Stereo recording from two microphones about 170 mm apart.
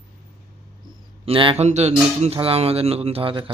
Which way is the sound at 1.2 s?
30° right (ahead or behind).